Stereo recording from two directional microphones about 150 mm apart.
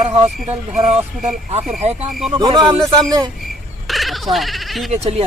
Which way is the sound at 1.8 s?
45° right (ahead or behind).